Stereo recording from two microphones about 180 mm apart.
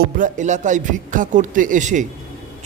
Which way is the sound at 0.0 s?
45° right (ahead or behind).